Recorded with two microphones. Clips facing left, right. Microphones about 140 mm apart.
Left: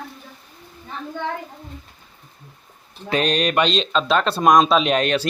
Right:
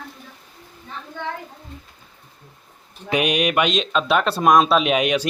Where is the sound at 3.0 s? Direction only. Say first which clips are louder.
Even; 10° right (ahead or behind).